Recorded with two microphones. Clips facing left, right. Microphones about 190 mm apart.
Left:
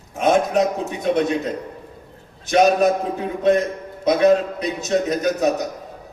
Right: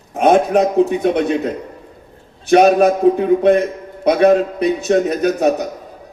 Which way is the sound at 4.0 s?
60° right (ahead or behind).